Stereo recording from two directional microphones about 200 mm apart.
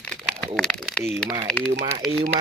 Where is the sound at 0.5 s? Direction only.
5° left (ahead or behind).